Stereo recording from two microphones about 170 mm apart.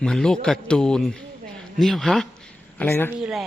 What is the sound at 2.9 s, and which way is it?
Speech, 10° left (ahead or behind).